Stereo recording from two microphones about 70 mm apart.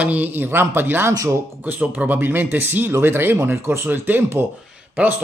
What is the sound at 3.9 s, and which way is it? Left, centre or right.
Speech, right.